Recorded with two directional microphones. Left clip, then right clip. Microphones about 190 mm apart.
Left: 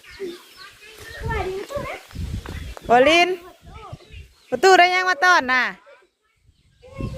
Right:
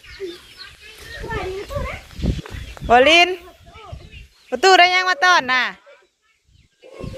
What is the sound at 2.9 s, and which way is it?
Speech, 15° left (ahead or behind).